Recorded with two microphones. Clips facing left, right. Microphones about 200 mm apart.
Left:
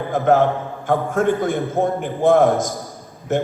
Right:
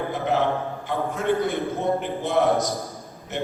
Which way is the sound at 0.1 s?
50° left (ahead or behind).